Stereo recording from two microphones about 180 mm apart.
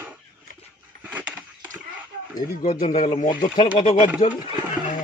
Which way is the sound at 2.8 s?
45° left (ahead or behind).